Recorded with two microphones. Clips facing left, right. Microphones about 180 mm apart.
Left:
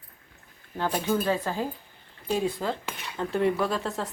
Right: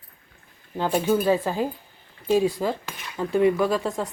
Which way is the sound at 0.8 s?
25° right (ahead or behind).